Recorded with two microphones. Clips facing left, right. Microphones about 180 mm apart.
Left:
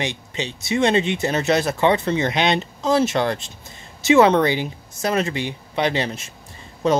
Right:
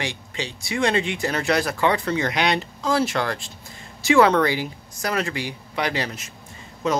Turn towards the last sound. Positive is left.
turn(degrees=35)  # may be behind; listen again after turning